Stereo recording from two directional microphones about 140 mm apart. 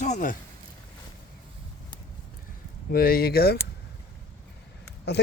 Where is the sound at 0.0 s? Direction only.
65° left (ahead or behind).